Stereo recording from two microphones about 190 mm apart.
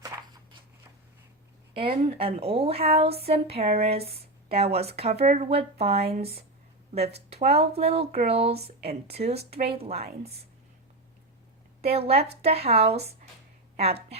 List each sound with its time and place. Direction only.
1.7 s speech: 30° right (ahead or behind)
11.8 s speech: 30° right (ahead or behind)